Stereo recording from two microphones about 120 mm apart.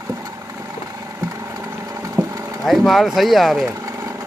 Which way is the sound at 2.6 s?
Centre (ahead or behind).